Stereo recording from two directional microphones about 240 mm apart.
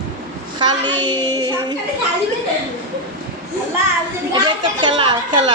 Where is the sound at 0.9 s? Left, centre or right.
Centre.